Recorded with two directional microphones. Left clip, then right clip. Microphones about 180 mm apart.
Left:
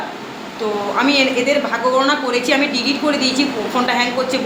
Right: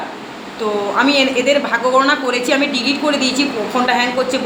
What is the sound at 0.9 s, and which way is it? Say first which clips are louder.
A woman's voice: right 1 dB; 25° right (ahead or behind).